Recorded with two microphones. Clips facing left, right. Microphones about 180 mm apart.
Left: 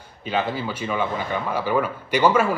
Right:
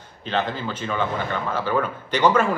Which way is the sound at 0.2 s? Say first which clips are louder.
Left 1 dB; 10° left (ahead or behind).